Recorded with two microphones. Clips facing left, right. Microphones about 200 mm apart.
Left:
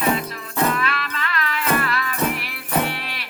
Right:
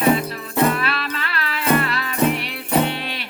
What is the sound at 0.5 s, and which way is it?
Music, 30° right (ahead or behind).